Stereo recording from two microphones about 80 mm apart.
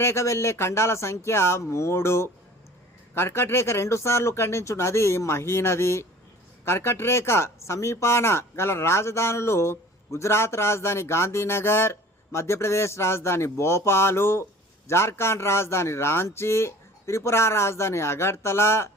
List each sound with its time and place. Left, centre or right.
0.0 s speech: left